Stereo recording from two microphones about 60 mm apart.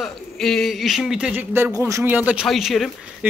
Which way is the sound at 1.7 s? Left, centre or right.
Right.